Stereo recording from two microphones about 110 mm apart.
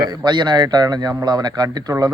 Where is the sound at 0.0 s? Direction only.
45° right (ahead or behind).